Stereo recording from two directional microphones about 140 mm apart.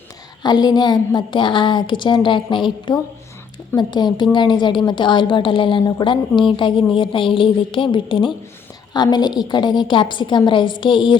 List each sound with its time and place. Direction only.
0.4 s a woman's voice: 30° left (ahead or behind)